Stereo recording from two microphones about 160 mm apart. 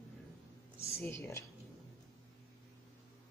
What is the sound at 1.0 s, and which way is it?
Speech, 15° left (ahead or behind).